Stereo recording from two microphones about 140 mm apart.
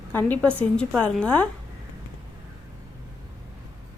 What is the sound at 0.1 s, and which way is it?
Speech, 15° left (ahead or behind).